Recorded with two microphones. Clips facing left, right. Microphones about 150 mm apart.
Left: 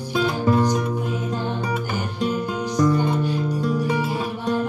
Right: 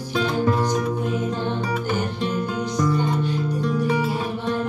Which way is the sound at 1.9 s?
10° left (ahead or behind).